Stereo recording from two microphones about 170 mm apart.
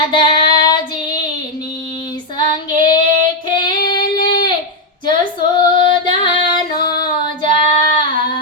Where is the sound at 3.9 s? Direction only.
25° left (ahead or behind).